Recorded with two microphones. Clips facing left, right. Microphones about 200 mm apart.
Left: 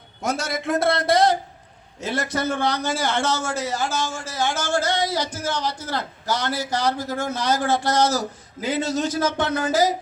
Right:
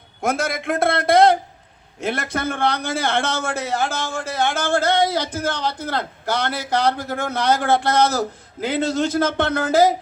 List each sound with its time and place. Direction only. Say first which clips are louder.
0.2 s a man's voice: right 3 dB; 55° right (ahead or behind)